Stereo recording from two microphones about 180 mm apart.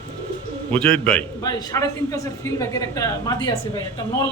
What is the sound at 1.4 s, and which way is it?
A woman's voice, 20° left (ahead or behind).